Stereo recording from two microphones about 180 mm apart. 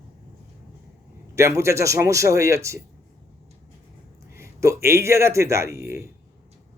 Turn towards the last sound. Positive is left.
turn(degrees=-15)  # may be behind; listen again after turning